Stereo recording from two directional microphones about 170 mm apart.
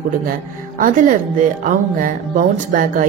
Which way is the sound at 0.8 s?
50° right (ahead or behind).